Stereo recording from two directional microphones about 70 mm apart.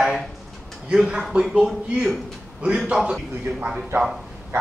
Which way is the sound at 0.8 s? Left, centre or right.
Centre.